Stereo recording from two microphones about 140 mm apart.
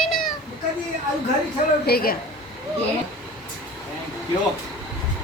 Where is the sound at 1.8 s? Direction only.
90° left.